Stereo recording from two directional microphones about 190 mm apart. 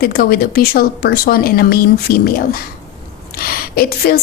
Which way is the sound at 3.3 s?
50° left (ahead or behind).